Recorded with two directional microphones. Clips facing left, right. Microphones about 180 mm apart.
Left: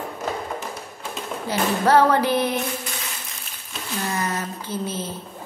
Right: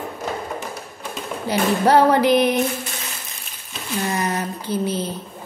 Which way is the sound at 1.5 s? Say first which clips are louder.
Right 2 dB; 15° right (ahead or behind).